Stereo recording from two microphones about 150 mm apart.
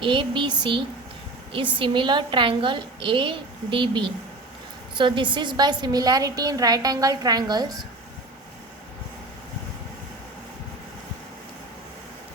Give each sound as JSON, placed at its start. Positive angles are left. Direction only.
{"t": 0.0, "sound": "a woman's voice", "side_deg": -35}
{"t": 1.8, "sound": "a woman's voice", "side_deg": -35}